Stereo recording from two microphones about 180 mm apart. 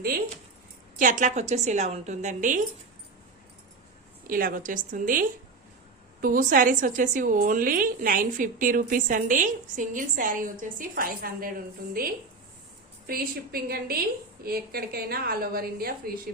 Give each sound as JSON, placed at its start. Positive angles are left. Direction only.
{"t": 0.9, "sound": "a woman's voice", "side_deg": -45}
{"t": 4.3, "sound": "a woman's voice", "side_deg": -50}
{"t": 6.2, "sound": "a woman's voice", "side_deg": -50}
{"t": 13.1, "sound": "a woman's voice", "side_deg": -55}